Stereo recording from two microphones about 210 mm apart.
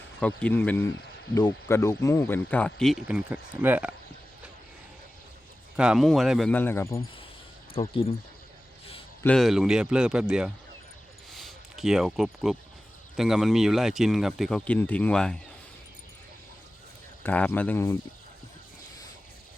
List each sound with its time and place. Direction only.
0.2 s speech: 5° left (ahead or behind)
5.7 s speech: 5° right (ahead or behind)
7.7 s speech: 25° left (ahead or behind)
9.2 s speech: centre (ahead or behind)
11.3 s a sound: centre (ahead or behind)
13.1 s speech: centre (ahead or behind)
17.2 s speech: 5° left (ahead or behind)